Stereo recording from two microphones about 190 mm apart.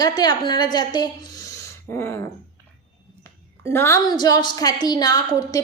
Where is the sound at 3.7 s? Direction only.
15° left (ahead or behind).